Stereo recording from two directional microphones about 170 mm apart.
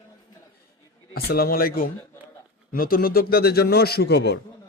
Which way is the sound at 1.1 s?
65° left (ahead or behind).